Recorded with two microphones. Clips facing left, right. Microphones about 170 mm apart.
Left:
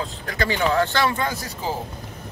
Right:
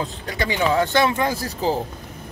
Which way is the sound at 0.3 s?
20° right (ahead or behind).